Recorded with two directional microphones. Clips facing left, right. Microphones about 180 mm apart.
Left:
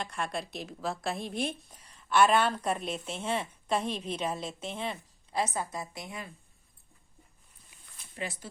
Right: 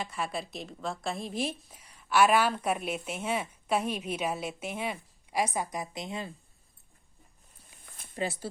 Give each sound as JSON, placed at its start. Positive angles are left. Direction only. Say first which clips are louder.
{"t": 0.0, "sound": "a woman's voice", "louder": "even", "side_deg": -5}
{"t": 7.9, "sound": "a sound", "louder": "right 6 dB", "side_deg": -50}
{"t": 8.2, "sound": "speech", "louder": "right 5 dB", "side_deg": -35}